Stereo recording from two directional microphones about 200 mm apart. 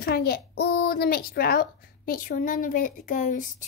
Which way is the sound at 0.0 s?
50° left (ahead or behind).